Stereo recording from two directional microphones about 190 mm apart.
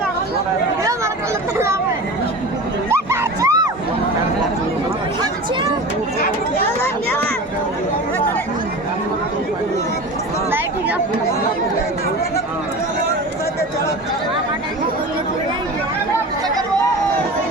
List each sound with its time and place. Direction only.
0.8 s chatter: 15° right (ahead or behind)
2.9 s a sound: 15° right (ahead or behind)
10.5 s chatter: 10° right (ahead or behind)